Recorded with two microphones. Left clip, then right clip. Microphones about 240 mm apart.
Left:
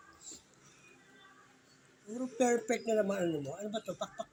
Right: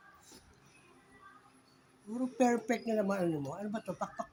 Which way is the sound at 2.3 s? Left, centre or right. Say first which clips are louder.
Even; centre.